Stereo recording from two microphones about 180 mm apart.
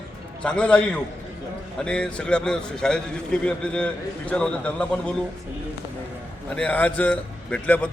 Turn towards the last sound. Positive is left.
turn(degrees=5)  # may be behind; listen again after turning